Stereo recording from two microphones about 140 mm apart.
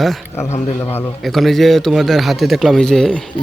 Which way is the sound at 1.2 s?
Centre (ahead or behind).